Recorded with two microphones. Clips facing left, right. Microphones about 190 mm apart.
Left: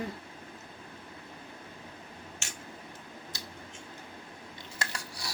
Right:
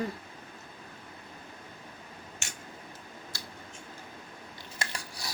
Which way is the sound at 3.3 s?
20° left (ahead or behind).